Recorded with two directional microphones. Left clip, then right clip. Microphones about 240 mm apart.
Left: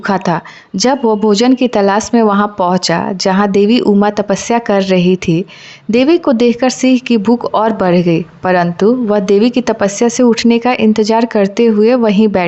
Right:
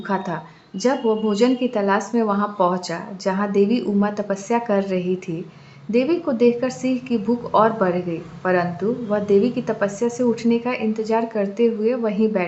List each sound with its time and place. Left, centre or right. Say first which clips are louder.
0.8 s a woman's voice: left 8 dB; left